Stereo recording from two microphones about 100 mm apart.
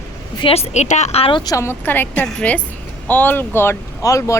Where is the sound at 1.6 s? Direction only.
20° left (ahead or behind).